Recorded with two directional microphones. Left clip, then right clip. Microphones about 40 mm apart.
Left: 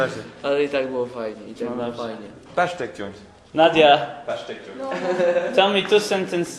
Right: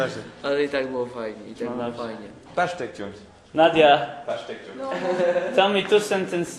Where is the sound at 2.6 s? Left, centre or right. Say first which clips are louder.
Left 2 dB; left.